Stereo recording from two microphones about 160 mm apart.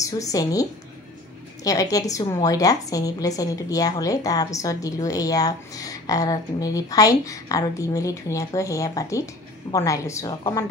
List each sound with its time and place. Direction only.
0.0 s a woman's voice: 20° left (ahead or behind)